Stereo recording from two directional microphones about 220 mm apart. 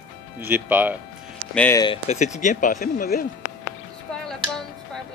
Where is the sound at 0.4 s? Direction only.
10° right (ahead or behind).